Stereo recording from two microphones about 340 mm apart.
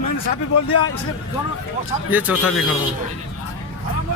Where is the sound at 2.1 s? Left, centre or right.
Centre.